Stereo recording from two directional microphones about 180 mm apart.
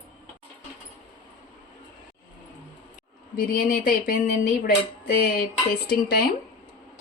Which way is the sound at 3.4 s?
50° left (ahead or behind).